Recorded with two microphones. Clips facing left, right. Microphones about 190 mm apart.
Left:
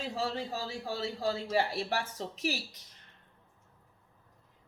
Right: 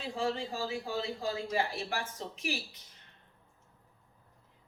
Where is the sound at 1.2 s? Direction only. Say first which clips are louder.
Left 5 dB; 40° left (ahead or behind).